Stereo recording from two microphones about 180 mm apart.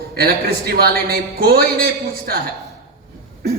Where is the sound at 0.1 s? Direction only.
55° right (ahead or behind).